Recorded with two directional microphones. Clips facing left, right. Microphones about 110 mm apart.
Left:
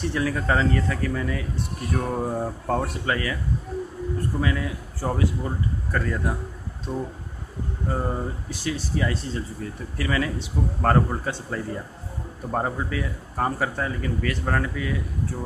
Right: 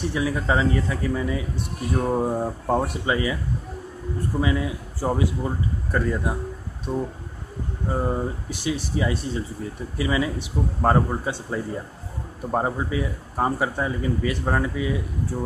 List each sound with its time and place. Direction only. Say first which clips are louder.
0.0 s a man's voice: right 1 dB; 15° right (ahead or behind)
4.4 s a man's voice: right 5 dB; 15° right (ahead or behind)